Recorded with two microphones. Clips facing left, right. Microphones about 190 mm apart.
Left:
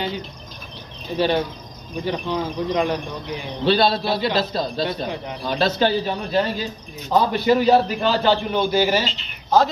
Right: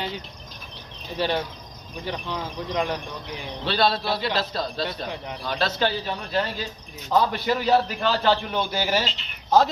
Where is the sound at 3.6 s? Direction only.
20° left (ahead or behind).